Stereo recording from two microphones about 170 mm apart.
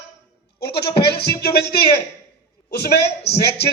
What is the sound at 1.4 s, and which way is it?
A man's voice, 70° left (ahead or behind).